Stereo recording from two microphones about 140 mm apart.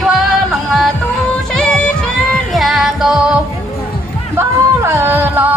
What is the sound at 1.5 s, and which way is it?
Music, 5° left (ahead or behind).